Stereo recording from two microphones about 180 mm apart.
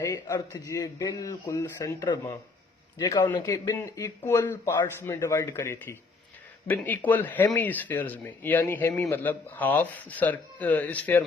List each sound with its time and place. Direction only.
0.0 s speech: 20° left (ahead or behind)